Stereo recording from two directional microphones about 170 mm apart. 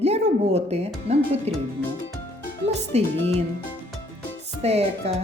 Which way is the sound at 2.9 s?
40° right (ahead or behind).